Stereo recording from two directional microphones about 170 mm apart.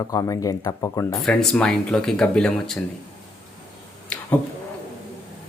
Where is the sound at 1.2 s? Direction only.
5° left (ahead or behind).